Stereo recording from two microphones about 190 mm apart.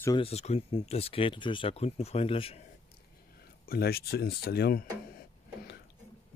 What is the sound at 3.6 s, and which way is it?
Speech, 55° left (ahead or behind).